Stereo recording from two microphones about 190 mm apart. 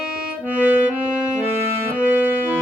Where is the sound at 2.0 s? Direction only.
10° right (ahead or behind).